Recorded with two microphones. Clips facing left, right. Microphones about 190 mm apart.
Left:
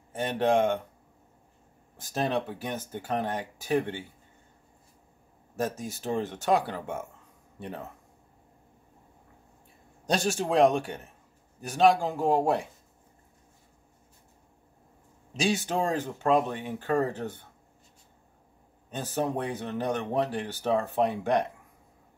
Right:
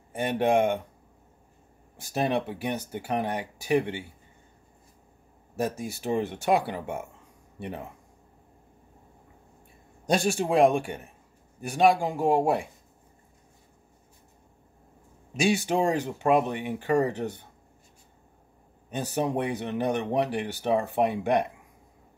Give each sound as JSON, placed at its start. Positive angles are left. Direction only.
{"t": 0.1, "sound": "speech", "side_deg": -10}
{"t": 2.0, "sound": "speech", "side_deg": -15}
{"t": 5.6, "sound": "speech", "side_deg": -10}
{"t": 10.0, "sound": "speech", "side_deg": -10}
{"t": 15.3, "sound": "speech", "side_deg": -15}
{"t": 19.1, "sound": "speech", "side_deg": -15}